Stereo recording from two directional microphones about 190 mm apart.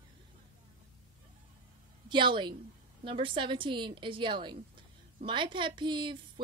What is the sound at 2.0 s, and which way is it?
A woman's voice, 25° right (ahead or behind).